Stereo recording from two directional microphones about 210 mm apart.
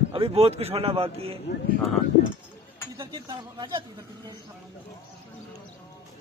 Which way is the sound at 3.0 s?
20° right (ahead or behind).